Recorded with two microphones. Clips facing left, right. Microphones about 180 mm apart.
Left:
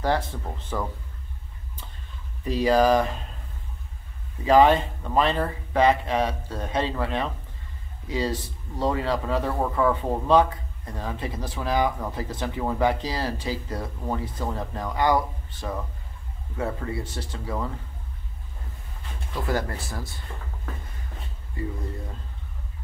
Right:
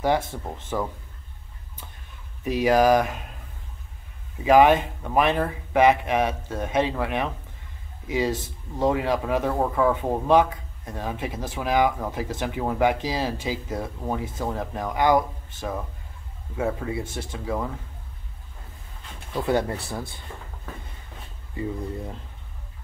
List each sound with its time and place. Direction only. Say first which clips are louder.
0.7 s speech: right 2 dB; 10° right (ahead or behind)
2.4 s speech: right 1 dB; 15° right (ahead or behind)
4.5 s speech: right 1 dB; 15° right (ahead or behind)
19.3 s speech: right 4 dB; 25° right (ahead or behind)